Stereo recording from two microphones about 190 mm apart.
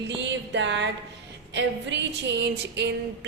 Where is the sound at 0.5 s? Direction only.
70° right (ahead or behind).